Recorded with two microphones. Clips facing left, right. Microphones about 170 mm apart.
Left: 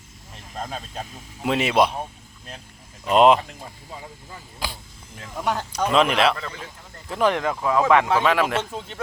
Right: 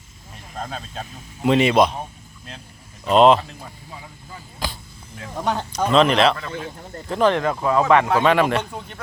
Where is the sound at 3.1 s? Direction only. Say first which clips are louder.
Right 2 dB; 10° left (ahead or behind).